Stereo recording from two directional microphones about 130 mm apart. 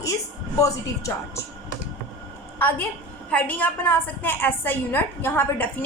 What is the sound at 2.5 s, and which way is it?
A woman's voice, 15° left (ahead or behind).